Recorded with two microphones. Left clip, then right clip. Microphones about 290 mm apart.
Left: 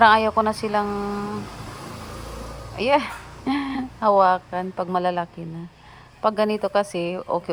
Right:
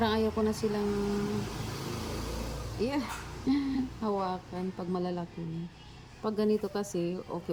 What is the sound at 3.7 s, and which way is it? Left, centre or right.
Speech, left.